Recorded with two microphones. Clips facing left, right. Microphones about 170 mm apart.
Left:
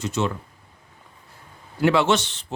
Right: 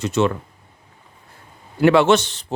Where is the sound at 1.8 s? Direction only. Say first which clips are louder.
Right 5 dB; 55° right (ahead or behind).